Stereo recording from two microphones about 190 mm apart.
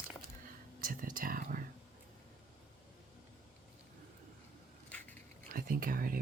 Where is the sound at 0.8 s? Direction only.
45° right (ahead or behind).